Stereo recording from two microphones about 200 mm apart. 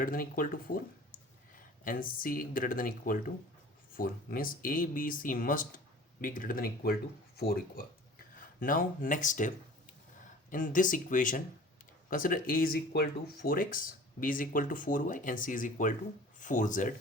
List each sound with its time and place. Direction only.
0.0 s speech: 45° left (ahead or behind)
1.8 s speech: 45° left (ahead or behind)